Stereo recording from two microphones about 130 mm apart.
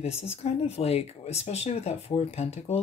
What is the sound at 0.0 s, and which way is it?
Speech, 55° left (ahead or behind).